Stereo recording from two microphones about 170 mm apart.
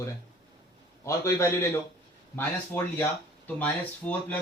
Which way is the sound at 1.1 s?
15° left (ahead or behind).